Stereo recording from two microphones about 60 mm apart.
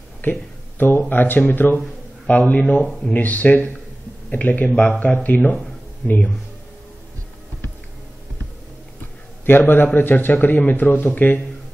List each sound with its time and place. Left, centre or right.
0.2 s a sound: left
1.0 s speech: left
9.5 s speech: left